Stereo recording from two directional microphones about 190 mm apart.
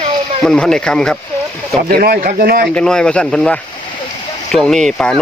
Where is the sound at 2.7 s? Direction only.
5° left (ahead or behind).